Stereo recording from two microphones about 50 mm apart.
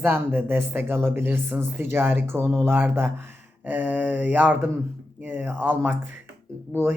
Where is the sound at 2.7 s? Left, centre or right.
Right.